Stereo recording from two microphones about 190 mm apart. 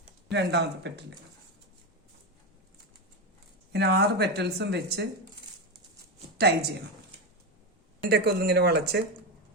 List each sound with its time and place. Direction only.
0.3 s speech: 65° right (ahead or behind)
3.7 s speech: 60° right (ahead or behind)
6.3 s a woman's voice: 60° right (ahead or behind)
8.1 s speech: 60° right (ahead or behind)